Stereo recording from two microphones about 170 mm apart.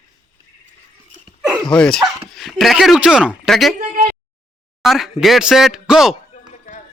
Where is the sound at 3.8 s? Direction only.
45° right (ahead or behind).